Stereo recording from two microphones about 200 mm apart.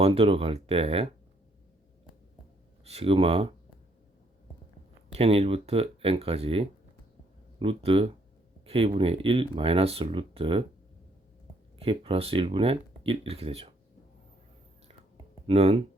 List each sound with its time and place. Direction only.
0.0 s speech: 30° right (ahead or behind)
2.8 s speech: 30° right (ahead or behind)
5.1 s speech: 30° right (ahead or behind)
11.8 s speech: 30° right (ahead or behind)
15.4 s speech: 30° right (ahead or behind)